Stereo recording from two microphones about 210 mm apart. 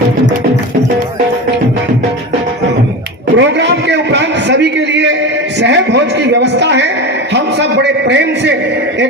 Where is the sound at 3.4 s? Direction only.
55° right (ahead or behind).